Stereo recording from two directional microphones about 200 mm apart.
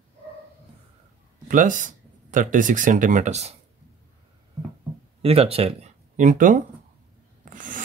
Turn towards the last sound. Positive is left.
turn(degrees=-40)  # may be behind; listen again after turning